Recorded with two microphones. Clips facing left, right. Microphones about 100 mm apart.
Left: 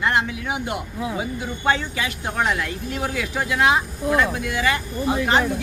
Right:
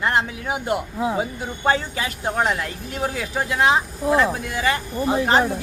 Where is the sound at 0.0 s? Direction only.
35° right (ahead or behind).